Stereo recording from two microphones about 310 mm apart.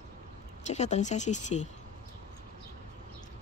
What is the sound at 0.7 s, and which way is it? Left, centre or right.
Speech, left.